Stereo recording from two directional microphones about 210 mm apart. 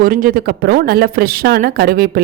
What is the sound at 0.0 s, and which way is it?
Speech, 45° right (ahead or behind).